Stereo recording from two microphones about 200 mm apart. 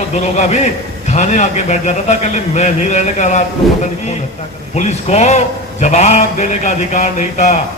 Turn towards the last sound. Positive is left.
turn(degrees=35)  # may be behind; listen again after turning